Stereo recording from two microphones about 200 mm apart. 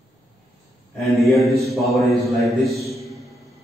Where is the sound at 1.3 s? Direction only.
15° right (ahead or behind).